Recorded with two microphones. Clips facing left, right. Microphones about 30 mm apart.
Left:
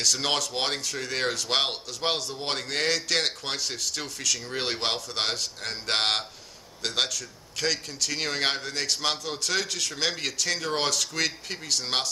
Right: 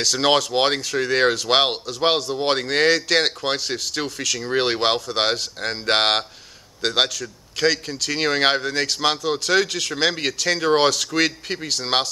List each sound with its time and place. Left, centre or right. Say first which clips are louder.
0.0 s a man's voice: right 7 dB; right
4.4 s a man's voice: right 9 dB; right